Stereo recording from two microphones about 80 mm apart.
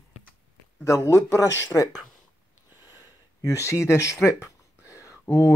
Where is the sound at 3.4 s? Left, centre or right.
Left.